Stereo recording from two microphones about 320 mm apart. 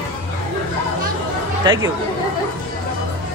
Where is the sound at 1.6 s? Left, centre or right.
Centre.